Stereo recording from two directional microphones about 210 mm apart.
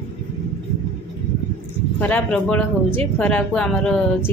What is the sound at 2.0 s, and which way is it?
A woman's voice, 5° left (ahead or behind).